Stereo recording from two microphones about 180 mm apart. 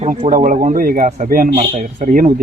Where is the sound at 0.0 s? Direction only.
40° right (ahead or behind).